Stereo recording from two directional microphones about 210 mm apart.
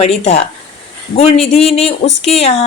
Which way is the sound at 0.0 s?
30° left (ahead or behind).